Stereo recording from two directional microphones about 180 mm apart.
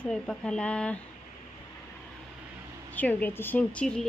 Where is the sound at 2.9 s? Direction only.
10° left (ahead or behind).